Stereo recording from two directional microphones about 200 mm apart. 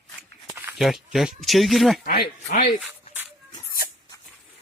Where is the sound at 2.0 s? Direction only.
50° left (ahead or behind).